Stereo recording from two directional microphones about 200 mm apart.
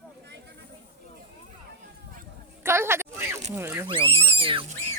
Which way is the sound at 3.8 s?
25° right (ahead or behind).